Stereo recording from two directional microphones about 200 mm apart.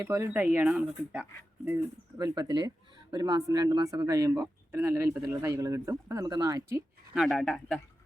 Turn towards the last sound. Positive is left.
turn(degrees=0)  # may be behind; listen again after turning